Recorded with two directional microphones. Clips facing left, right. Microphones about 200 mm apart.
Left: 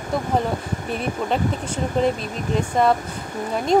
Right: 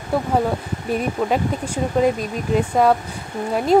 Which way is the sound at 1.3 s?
10° right (ahead or behind).